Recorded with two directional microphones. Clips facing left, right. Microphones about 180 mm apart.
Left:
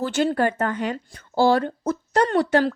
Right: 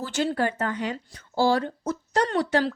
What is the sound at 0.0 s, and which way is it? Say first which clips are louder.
Speech: left 4 dB; 55° left (ahead or behind).